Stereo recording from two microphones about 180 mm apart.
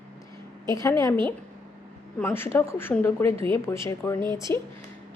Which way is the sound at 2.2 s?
15° left (ahead or behind).